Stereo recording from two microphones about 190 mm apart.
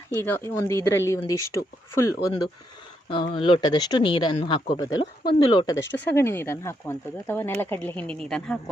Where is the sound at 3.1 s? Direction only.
25° left (ahead or behind).